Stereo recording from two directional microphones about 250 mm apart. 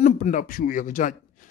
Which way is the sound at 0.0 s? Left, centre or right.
Left.